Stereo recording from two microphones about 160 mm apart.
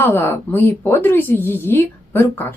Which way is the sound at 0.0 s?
15° left (ahead or behind).